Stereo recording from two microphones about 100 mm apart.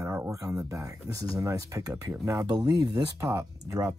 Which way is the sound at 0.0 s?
30° right (ahead or behind).